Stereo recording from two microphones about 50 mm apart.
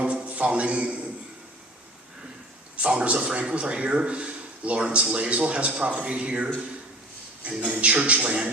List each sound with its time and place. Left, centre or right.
0.0 s a sound: right
2.7 s a man's voice: right
7.6 s speech: right